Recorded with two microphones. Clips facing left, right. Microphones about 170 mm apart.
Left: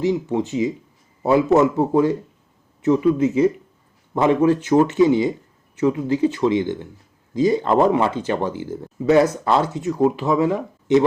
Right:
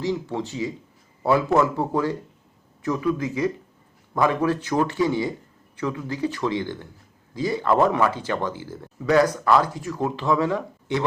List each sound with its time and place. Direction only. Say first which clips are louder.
0.0 s speech: left 6 dB; 15° left (ahead or behind)